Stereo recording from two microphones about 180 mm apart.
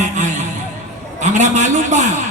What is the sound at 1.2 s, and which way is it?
Speech, 40° right (ahead or behind).